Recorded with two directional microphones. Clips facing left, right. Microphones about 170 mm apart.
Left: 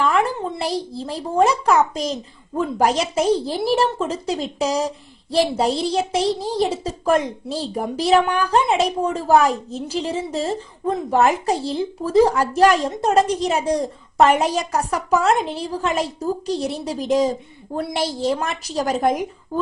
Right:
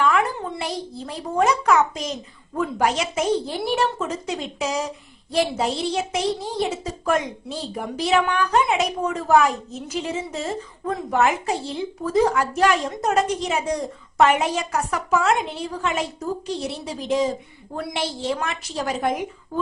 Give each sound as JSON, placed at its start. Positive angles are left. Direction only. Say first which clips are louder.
{"t": 0.0, "sound": "a child's voice", "louder": "left 2 dB", "side_deg": 35}